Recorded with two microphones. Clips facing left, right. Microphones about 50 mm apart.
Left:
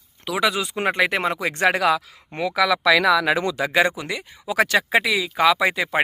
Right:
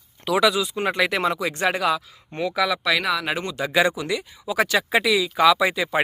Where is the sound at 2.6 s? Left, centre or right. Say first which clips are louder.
Left 3 dB; left.